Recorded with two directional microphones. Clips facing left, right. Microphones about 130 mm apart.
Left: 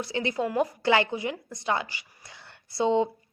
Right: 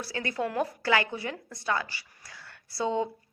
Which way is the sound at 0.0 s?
20° left (ahead or behind).